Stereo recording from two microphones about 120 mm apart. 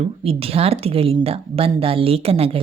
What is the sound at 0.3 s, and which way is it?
A woman's voice, 55° right (ahead or behind).